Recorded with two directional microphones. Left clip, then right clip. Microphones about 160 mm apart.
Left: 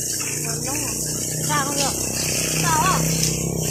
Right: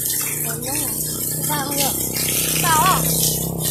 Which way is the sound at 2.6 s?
25° right (ahead or behind).